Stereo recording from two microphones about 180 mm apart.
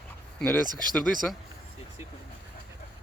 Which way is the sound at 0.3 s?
10° left (ahead or behind).